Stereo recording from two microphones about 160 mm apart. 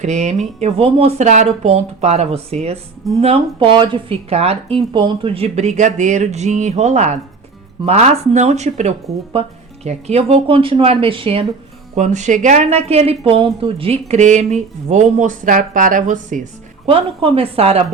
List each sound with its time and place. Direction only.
0.0 s speech: 45° right (ahead or behind)
11.9 s speech: 50° right (ahead or behind)
16.8 s speech: 35° right (ahead or behind)